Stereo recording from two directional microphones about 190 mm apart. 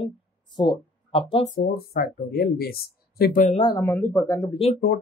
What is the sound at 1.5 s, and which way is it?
Speech, 50° left (ahead or behind).